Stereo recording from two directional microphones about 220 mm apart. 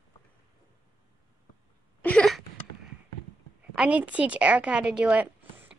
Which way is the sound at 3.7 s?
5° right (ahead or behind).